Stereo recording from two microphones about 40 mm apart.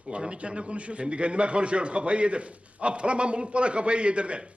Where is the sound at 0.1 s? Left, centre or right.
Right.